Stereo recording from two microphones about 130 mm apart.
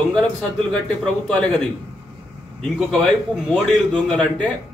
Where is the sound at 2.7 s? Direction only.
5° left (ahead or behind).